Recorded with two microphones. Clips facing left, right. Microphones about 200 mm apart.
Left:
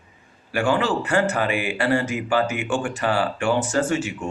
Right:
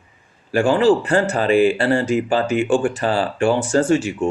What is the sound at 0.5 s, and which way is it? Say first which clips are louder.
Speech: right 7 dB; 30° right (ahead or behind).